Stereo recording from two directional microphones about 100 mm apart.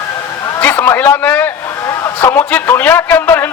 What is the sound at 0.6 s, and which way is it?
A man's voice, 20° left (ahead or behind).